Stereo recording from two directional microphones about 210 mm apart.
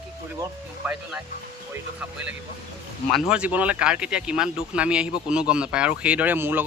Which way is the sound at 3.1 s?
5° right (ahead or behind).